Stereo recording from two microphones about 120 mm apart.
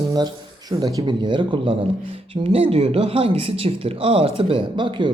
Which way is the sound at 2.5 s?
50° right (ahead or behind).